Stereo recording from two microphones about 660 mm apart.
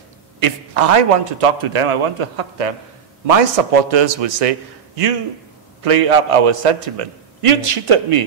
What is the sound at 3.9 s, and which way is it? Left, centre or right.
A man's voice, right.